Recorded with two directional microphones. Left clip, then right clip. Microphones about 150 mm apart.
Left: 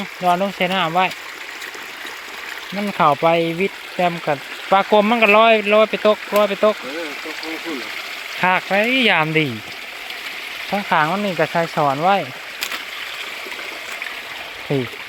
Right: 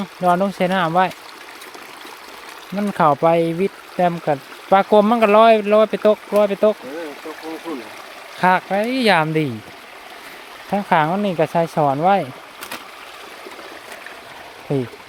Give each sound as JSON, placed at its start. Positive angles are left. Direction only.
{"t": 0.2, "sound": "speech", "side_deg": -55}
{"t": 2.7, "sound": "speech", "side_deg": -40}
{"t": 8.4, "sound": "speech", "side_deg": -15}
{"t": 10.8, "sound": "speech", "side_deg": -40}
{"t": 11.8, "sound": "speech", "side_deg": -30}